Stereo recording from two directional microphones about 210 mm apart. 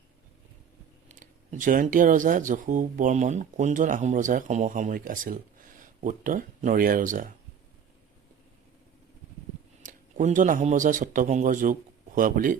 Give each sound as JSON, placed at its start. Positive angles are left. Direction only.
{"t": 1.0, "sound": "speech", "side_deg": -40}
{"t": 9.8, "sound": "speech", "side_deg": -40}